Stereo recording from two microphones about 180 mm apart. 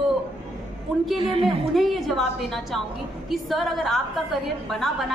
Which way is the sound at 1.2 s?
30° right (ahead or behind).